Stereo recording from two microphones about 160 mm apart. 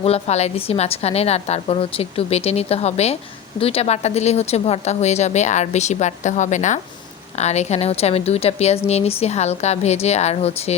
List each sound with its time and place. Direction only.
0.0 s a woman's voice: 40° left (ahead or behind)